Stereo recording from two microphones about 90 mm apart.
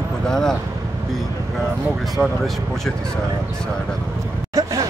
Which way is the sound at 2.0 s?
Centre (ahead or behind).